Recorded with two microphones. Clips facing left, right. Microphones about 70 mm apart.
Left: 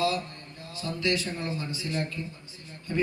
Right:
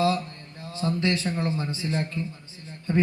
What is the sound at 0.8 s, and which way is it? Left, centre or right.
A man's voice, right.